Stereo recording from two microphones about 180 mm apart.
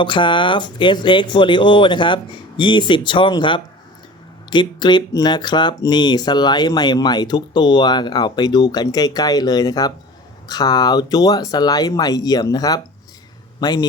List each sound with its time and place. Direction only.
0.0 s speech: 25° left (ahead or behind)